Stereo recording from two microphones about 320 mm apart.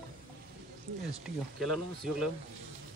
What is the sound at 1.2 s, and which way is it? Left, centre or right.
Speech, centre.